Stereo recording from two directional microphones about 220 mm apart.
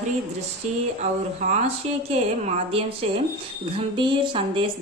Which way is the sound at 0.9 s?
35° right (ahead or behind).